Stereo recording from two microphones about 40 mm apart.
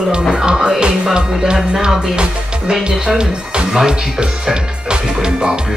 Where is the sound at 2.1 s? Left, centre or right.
Right.